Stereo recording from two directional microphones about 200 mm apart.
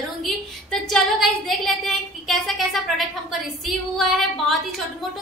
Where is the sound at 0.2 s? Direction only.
Centre (ahead or behind).